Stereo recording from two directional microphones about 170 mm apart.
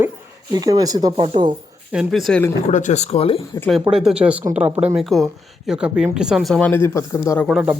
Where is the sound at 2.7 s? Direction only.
45° left (ahead or behind).